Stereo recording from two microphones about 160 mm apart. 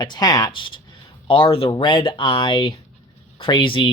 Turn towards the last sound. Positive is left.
turn(degrees=30)  # may be behind; listen again after turning